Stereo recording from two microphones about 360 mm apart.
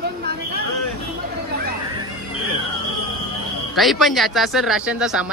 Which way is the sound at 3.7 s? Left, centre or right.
Centre.